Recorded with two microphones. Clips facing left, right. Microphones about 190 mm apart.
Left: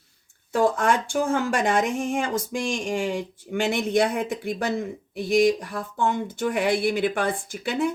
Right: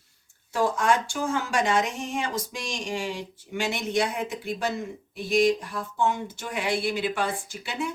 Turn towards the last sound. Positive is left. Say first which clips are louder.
# left 7 dB
turn(degrees=55)  # may be behind; listen again after turning